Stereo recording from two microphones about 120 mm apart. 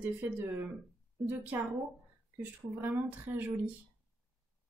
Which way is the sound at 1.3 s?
15° right (ahead or behind).